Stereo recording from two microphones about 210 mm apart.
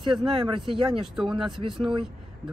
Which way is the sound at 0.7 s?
25° right (ahead or behind).